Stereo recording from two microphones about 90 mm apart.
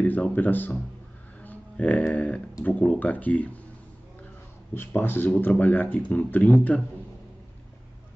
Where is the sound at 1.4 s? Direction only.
15° left (ahead or behind).